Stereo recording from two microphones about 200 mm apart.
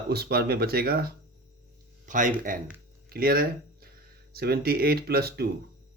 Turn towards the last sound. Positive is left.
turn(degrees=-50)  # may be behind; listen again after turning